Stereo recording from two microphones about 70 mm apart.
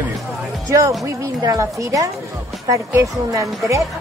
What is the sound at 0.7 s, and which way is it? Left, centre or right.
A woman's voice, right.